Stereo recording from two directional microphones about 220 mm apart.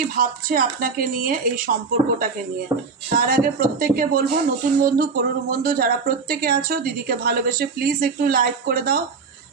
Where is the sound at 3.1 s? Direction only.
40° right (ahead or behind).